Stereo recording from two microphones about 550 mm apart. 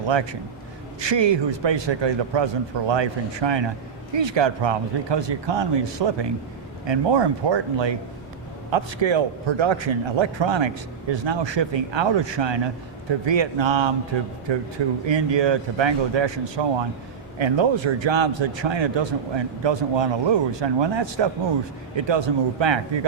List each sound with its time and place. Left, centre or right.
0.1 s a man's voice: right